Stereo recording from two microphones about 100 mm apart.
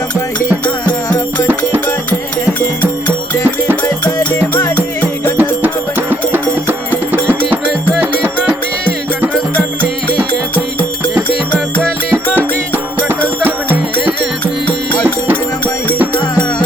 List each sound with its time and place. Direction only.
5.4 s music: 20° right (ahead or behind)
11.5 s music: 5° left (ahead or behind)
12.1 s music: 20° right (ahead or behind)